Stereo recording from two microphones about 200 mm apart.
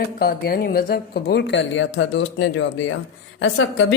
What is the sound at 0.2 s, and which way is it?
A man's voice, 50° left (ahead or behind).